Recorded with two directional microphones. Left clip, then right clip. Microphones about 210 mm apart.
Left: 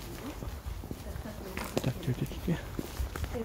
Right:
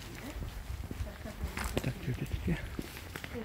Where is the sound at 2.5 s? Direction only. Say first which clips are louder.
Left 2 dB; 5° left (ahead or behind).